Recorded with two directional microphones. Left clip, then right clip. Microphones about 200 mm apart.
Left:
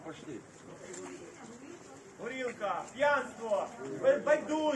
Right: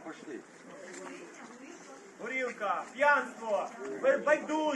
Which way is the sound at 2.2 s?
Centre (ahead or behind).